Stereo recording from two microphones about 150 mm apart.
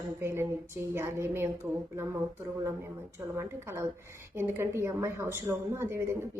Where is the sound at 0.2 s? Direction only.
15° right (ahead or behind).